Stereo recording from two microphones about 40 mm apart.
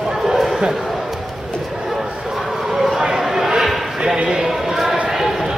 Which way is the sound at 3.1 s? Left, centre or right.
Centre.